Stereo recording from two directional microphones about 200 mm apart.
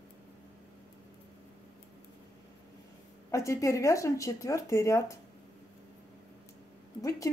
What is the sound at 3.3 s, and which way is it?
Speech, 15° left (ahead or behind).